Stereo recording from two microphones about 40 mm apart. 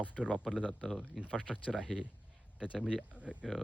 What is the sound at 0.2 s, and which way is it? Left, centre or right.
Speech, centre.